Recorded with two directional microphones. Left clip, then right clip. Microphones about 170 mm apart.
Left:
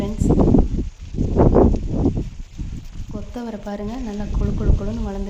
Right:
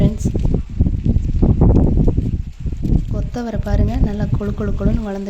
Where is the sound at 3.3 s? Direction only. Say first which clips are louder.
Right 5 dB; 15° right (ahead or behind).